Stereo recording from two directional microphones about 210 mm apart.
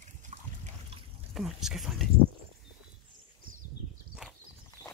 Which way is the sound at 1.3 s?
Centre (ahead or behind).